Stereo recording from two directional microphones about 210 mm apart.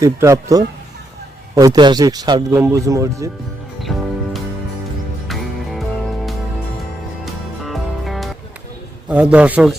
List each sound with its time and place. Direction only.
0.0 s a man's voice: 15° right (ahead or behind)
3.8 s music: centre (ahead or behind)
7.6 s music: centre (ahead or behind)
9.0 s a man's voice: 5° right (ahead or behind)